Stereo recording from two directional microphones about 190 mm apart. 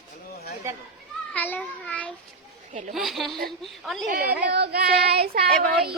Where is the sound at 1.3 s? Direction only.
10° left (ahead or behind).